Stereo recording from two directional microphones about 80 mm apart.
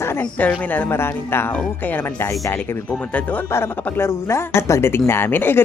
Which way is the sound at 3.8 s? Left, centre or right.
Left.